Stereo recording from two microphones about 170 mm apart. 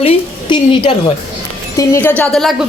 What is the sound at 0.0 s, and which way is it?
Speech, 30° left (ahead or behind).